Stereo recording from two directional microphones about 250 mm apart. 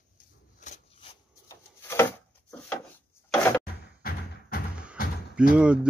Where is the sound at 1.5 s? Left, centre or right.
Centre.